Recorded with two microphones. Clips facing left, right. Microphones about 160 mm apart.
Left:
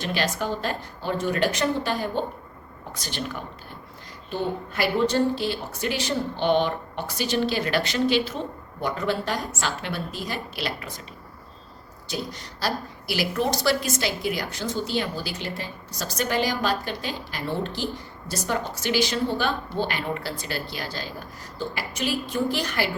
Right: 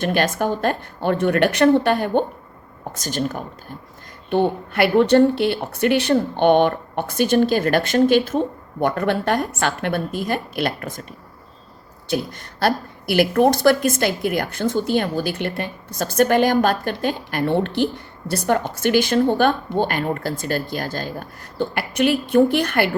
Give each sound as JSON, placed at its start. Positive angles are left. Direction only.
{"t": 0.0, "sound": "speech", "side_deg": -50}
{"t": 2.9, "sound": "a woman's voice", "side_deg": -45}
{"t": 4.3, "sound": "speech", "side_deg": -65}
{"t": 8.8, "sound": "speech", "side_deg": -60}
{"t": 12.0, "sound": "a woman's voice", "side_deg": -55}